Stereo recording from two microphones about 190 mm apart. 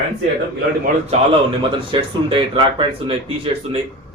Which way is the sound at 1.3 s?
30° right (ahead or behind).